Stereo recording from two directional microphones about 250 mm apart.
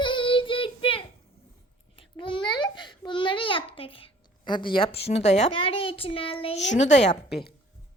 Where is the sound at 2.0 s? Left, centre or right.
Centre.